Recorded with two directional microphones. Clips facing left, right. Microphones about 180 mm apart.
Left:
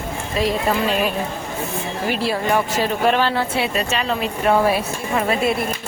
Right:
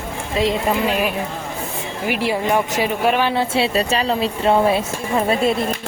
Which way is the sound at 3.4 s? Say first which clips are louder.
Right 3 dB; 25° right (ahead or behind).